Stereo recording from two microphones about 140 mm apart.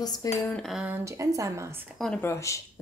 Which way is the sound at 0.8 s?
15° right (ahead or behind).